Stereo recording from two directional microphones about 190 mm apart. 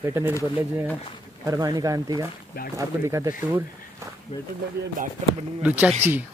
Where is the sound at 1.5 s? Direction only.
20° right (ahead or behind).